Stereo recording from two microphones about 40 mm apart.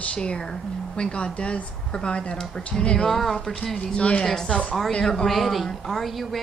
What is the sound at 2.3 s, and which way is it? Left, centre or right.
Speech, centre.